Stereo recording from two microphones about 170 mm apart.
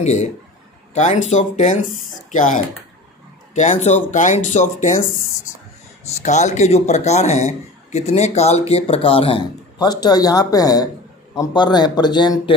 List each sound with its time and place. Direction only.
0.0 s a man's voice: 40° left (ahead or behind)
6.0 s speech: 45° left (ahead or behind); by 12.5 s 25° left (ahead or behind)